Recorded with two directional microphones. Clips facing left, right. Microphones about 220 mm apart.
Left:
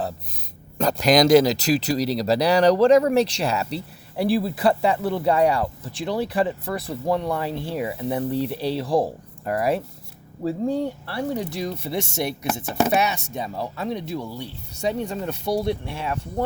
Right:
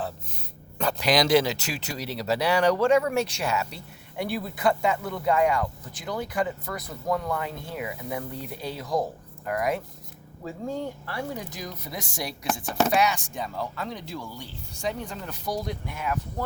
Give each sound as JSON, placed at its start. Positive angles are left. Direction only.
{"t": 0.8, "sound": "speech", "side_deg": 40}
{"t": 12.6, "sound": "chopping", "side_deg": 10}
{"t": 12.9, "sound": "speech", "side_deg": 25}